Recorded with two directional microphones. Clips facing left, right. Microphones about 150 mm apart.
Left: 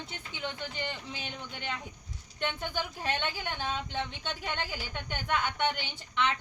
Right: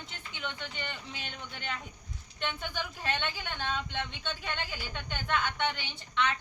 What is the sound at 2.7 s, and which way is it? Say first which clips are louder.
Speech: left 2 dB; 10° left (ahead or behind).